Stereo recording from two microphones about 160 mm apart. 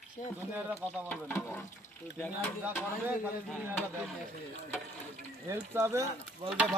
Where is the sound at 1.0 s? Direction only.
10° left (ahead or behind).